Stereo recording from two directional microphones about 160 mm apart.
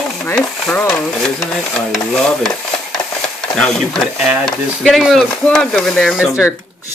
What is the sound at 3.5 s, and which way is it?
Speech, 5° left (ahead or behind).